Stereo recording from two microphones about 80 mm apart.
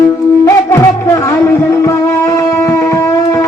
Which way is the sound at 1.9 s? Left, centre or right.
Left.